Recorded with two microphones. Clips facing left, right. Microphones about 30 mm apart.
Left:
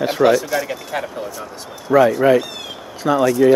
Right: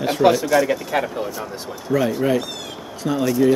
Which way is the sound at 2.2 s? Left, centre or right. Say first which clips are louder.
Left 6 dB; centre.